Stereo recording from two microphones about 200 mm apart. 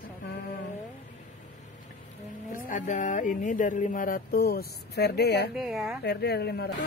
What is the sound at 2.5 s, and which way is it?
Speech, 40° left (ahead or behind).